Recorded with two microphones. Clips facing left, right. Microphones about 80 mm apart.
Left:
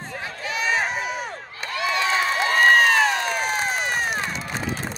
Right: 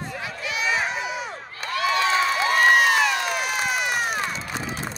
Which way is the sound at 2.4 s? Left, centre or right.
Left.